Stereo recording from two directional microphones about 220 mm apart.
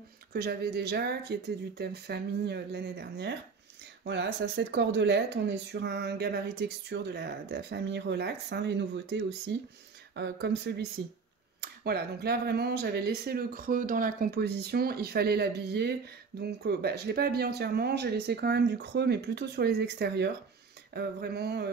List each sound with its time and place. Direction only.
0.3 s speech: 45° right (ahead or behind)